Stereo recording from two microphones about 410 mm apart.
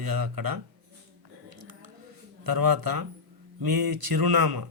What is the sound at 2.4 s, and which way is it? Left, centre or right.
Speech, right.